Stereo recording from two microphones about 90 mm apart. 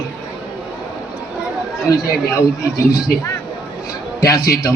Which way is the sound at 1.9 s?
35° left (ahead or behind).